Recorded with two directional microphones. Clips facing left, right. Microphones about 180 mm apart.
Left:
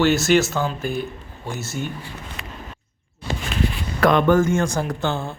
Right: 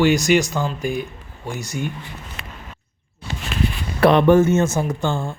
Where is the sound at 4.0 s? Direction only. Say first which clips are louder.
Right 3 dB; 30° right (ahead or behind).